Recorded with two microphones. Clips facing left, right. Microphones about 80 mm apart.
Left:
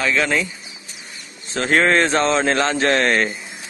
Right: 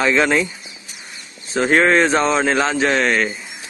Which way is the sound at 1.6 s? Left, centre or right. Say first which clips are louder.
Right 2 dB; centre.